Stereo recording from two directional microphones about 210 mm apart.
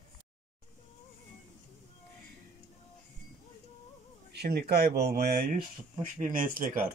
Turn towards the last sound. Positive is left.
turn(degrees=-45)  # may be behind; listen again after turning